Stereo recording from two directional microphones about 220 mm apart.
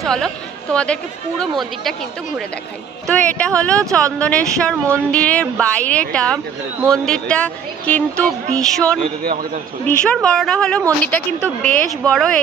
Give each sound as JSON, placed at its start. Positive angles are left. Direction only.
{"t": 0.0, "sound": "speech", "side_deg": 0}
{"t": 9.2, "sound": "a man's voice", "side_deg": -40}
{"t": 9.8, "sound": "speech", "side_deg": 5}